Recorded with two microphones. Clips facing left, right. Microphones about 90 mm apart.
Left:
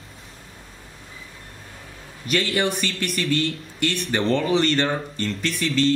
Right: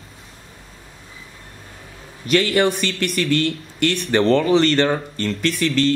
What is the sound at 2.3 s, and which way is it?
Speech, 90° right.